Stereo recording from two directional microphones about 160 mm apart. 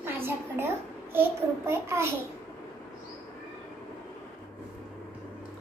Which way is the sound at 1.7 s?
15° right (ahead or behind).